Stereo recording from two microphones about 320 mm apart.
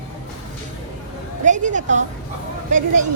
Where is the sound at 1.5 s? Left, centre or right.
Right.